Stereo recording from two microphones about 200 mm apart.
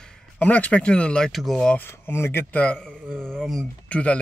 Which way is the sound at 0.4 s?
5° left (ahead or behind).